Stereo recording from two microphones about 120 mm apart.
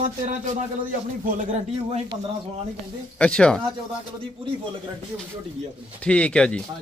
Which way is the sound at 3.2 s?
10° left (ahead or behind).